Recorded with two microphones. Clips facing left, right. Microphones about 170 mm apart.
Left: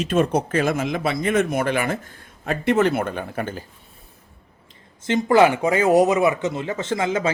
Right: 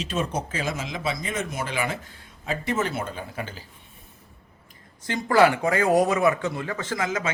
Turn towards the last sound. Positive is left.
turn(degrees=30)  # may be behind; listen again after turning